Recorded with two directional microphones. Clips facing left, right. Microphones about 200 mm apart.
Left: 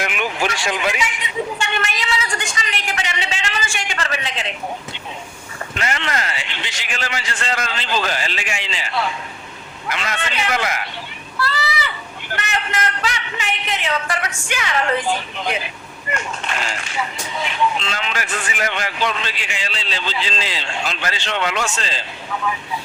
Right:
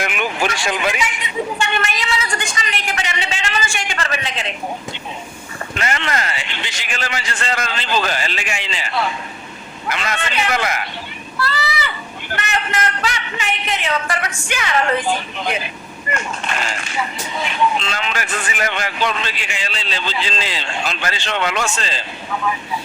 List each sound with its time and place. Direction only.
0.0 s vehicle: 50° right (ahead or behind)
5.8 s a man's voice: 50° right (ahead or behind)
16.1 s a man's voice: 50° right (ahead or behind)